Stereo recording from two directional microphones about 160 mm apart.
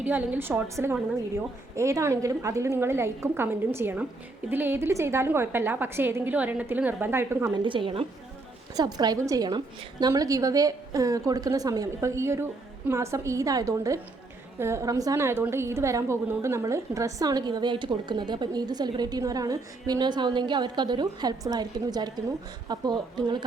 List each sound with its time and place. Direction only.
0.0 s a woman's voice: 10° right (ahead or behind)
7.5 s a woman's voice: 30° right (ahead or behind)